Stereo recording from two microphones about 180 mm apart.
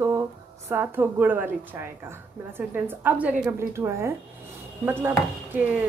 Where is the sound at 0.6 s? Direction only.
10° right (ahead or behind).